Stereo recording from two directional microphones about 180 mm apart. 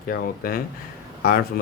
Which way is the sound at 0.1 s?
55° left (ahead or behind).